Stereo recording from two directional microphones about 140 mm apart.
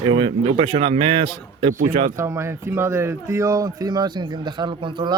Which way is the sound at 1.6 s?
65° right (ahead or behind).